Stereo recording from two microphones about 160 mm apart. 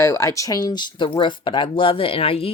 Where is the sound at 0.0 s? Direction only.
20° left (ahead or behind).